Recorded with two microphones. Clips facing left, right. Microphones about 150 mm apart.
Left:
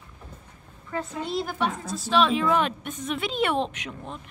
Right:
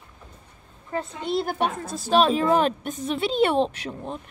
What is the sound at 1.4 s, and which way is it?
A woman's voice, 55° right (ahead or behind).